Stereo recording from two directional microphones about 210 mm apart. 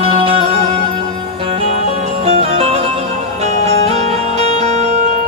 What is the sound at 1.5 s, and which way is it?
Music, 30° right (ahead or behind).